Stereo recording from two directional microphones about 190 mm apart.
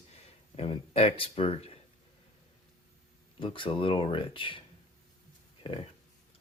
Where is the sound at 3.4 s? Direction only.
25° left (ahead or behind).